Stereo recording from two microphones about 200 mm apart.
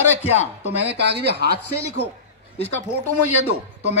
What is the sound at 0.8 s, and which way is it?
Speech, 55° right (ahead or behind).